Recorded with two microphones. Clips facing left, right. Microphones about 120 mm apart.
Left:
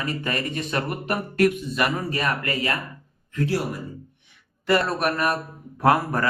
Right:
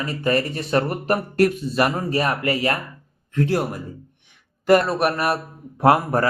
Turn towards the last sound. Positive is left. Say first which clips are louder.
# right 3 dB
turn(degrees=-30)  # may be behind; listen again after turning